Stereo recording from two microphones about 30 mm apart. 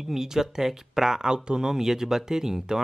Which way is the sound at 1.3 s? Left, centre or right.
Right.